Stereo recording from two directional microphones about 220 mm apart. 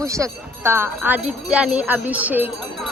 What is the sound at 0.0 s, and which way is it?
Wind chime, 15° right (ahead or behind).